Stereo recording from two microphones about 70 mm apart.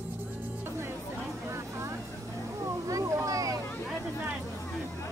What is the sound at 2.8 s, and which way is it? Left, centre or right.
Vehicle, right.